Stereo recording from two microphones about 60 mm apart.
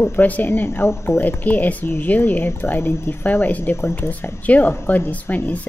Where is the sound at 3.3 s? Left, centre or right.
Left.